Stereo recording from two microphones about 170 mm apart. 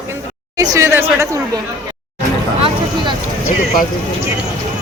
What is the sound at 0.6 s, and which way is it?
Speech, 20° right (ahead or behind).